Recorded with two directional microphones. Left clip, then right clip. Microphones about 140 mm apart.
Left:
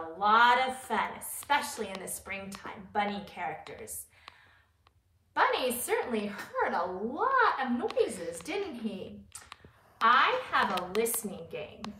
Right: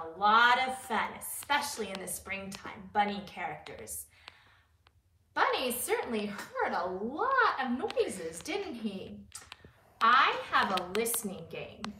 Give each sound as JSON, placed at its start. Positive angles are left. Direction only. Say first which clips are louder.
{"t": 0.2, "sound": "speech", "louder": "left 1 dB", "side_deg": 0}
{"t": 5.3, "sound": "a sound", "louder": "left 2 dB", "side_deg": 5}
{"t": 5.9, "sound": "speech", "louder": "left 1 dB", "side_deg": 5}
{"t": 10.7, "sound": "a woman's voice", "louder": "even", "side_deg": -45}
{"t": 11.0, "sound": "speech", "louder": "left 2 dB", "side_deg": 0}